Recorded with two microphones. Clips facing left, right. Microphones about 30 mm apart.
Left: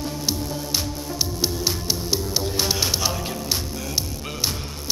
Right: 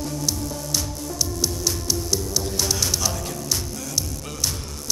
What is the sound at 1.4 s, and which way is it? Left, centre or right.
Music, left.